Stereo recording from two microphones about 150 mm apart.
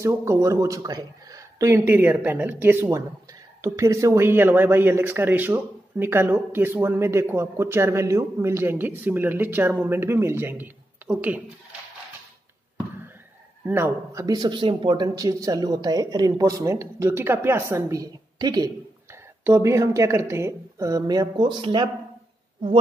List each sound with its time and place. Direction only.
0.0 s speech: 20° right (ahead or behind)
13.7 s speech: 15° right (ahead or behind)
14.2 s speech: 25° right (ahead or behind)